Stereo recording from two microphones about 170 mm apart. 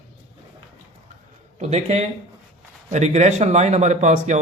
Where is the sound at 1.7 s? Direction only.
40° right (ahead or behind).